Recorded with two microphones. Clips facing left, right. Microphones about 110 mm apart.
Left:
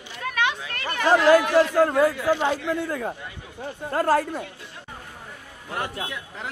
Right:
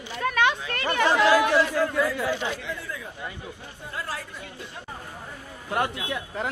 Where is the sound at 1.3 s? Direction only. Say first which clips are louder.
Left 3 dB; 50° left (ahead or behind).